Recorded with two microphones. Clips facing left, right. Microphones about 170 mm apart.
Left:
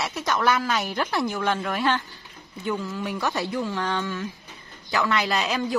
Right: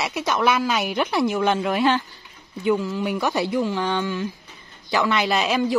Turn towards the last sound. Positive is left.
turn(degrees=-5)  # may be behind; listen again after turning